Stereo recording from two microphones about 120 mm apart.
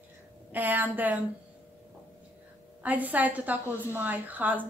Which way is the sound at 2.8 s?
15° right (ahead or behind).